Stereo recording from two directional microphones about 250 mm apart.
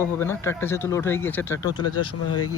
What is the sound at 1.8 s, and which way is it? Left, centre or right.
Speech, left.